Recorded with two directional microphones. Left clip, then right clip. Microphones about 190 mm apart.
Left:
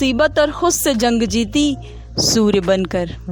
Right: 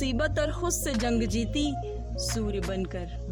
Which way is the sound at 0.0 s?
45° left (ahead or behind).